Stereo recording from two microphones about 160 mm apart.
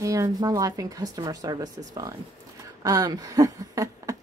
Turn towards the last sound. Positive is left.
turn(degrees=-20)  # may be behind; listen again after turning